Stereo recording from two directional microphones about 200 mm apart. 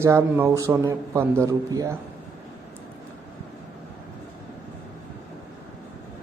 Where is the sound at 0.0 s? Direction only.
10° right (ahead or behind).